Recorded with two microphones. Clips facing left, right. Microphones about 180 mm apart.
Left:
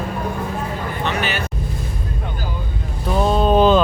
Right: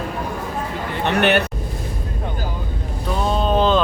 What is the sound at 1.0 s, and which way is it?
Speech, 65° right (ahead or behind).